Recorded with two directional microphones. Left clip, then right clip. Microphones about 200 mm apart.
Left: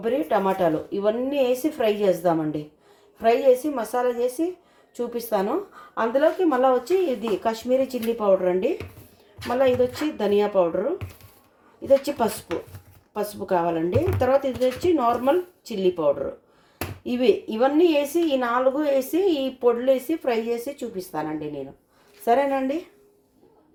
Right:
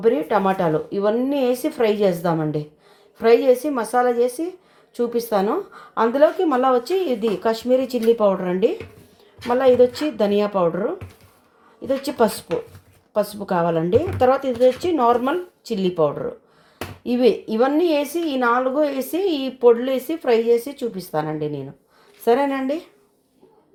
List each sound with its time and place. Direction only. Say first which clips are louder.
0.0 s a woman's voice: right 4 dB; 40° right (ahead or behind)
12.0 s a woman's voice: right 5 dB; 40° right (ahead or behind)